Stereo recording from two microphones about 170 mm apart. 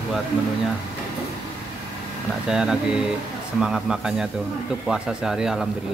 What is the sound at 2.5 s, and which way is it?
Speech, 5° right (ahead or behind).